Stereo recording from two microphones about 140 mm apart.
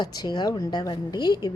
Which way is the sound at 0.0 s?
30° left (ahead or behind).